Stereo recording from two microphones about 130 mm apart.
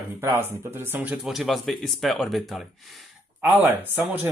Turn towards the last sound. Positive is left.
turn(degrees=-15)  # may be behind; listen again after turning